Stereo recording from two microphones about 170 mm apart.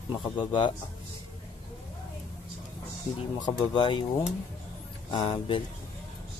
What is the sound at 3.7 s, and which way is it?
Speech, 30° left (ahead or behind).